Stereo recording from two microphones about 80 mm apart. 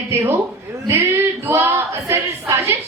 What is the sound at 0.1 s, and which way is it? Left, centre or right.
A woman's voice, right.